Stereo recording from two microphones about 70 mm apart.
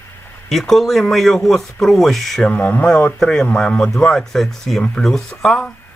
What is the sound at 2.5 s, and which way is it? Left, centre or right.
Speech, left.